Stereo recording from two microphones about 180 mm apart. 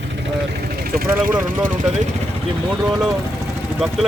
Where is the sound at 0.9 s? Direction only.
55° right (ahead or behind).